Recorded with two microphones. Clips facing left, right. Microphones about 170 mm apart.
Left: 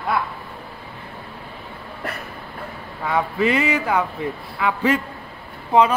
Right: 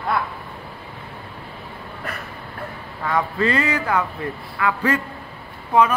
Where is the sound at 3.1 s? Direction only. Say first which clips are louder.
Left 1 dB; 15° left (ahead or behind).